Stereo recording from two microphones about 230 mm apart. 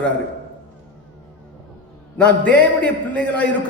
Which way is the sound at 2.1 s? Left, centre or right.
Centre.